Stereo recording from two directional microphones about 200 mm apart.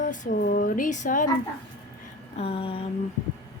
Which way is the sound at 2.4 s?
30° left (ahead or behind).